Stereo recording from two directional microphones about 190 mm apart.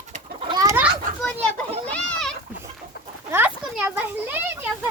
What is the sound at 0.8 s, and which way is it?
Children playing, 5° right (ahead or behind).